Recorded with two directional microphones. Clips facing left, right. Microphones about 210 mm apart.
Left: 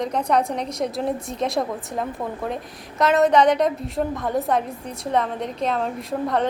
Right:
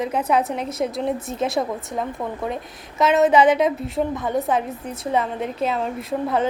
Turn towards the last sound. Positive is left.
turn(degrees=-5)  # may be behind; listen again after turning